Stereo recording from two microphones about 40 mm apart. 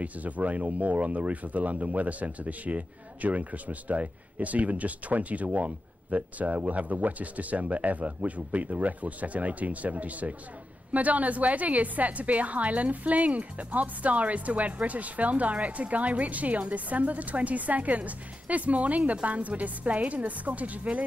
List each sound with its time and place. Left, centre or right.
0.0 s speech: right